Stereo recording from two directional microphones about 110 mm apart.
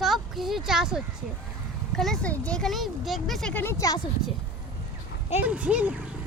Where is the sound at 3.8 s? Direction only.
30° left (ahead or behind).